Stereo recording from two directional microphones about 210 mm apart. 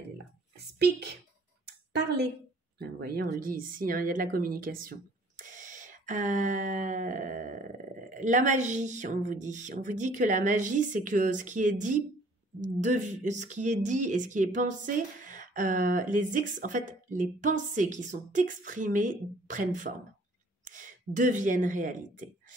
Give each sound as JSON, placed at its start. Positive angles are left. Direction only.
{"t": 0.7, "sound": "speech", "side_deg": -50}
{"t": 5.4, "sound": "a sound", "side_deg": -35}
{"t": 8.1, "sound": "speech", "side_deg": -35}